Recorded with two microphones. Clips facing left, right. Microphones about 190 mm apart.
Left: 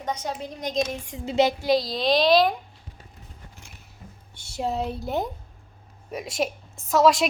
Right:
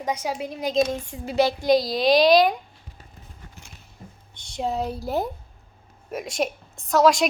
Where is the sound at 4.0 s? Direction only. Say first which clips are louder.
Right 2 dB; 40° right (ahead or behind).